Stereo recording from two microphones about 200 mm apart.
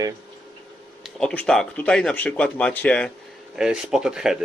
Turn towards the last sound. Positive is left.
turn(degrees=-5)  # may be behind; listen again after turning